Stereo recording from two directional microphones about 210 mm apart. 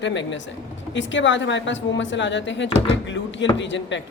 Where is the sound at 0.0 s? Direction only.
60° left (ahead or behind).